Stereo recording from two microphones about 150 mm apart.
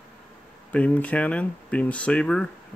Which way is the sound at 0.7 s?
10° left (ahead or behind).